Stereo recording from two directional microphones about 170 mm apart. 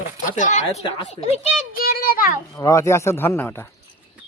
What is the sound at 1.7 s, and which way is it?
Speech, 60° left (ahead or behind).